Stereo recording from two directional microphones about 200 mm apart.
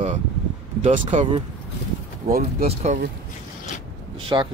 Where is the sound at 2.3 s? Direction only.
50° right (ahead or behind).